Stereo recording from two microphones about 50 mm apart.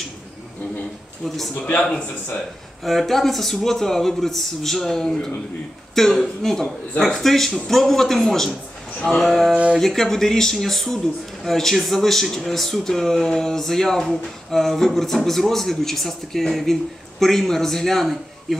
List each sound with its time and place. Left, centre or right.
1.2 s a man's voice: centre
1.6 s speech: centre
2.8 s a man's voice: centre